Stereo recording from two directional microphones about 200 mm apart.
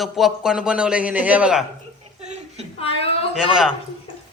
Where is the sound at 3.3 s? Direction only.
5° right (ahead or behind).